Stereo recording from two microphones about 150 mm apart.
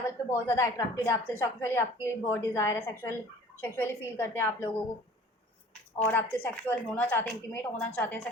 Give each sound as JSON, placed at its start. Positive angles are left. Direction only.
{"t": 0.0, "sound": "speech", "side_deg": 20}
{"t": 6.1, "sound": "speech", "side_deg": 10}